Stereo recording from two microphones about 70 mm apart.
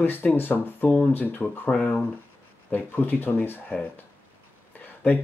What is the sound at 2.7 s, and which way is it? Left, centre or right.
Speech, left.